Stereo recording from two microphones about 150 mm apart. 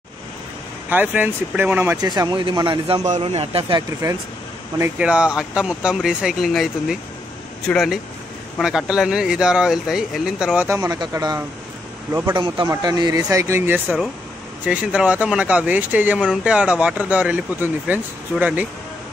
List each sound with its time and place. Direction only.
0.8 s speech: 10° right (ahead or behind)
2.0 s speech: 25° right (ahead or behind)
3.1 s speech: 40° right (ahead or behind)
4.7 s speech: 15° right (ahead or behind)
5.0 s speech: 5° right (ahead or behind)
12.4 s speech: 30° right (ahead or behind); by 18.7 s 10° right (ahead or behind)